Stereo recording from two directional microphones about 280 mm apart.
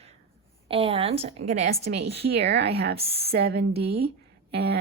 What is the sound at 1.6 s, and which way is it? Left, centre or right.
Speech, right.